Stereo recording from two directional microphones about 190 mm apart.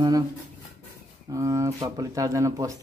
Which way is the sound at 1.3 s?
15° right (ahead or behind).